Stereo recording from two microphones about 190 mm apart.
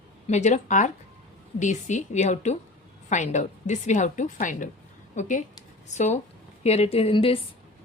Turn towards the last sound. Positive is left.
turn(degrees=30)  # may be behind; listen again after turning